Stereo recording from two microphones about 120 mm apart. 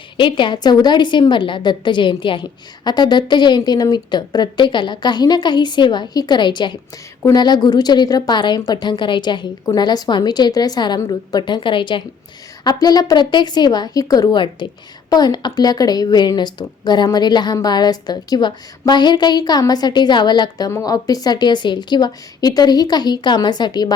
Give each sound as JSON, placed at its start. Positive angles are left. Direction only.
{"t": 0.2, "sound": "a woman's voice", "side_deg": 45}
{"t": 12.6, "sound": "a woman's voice", "side_deg": 35}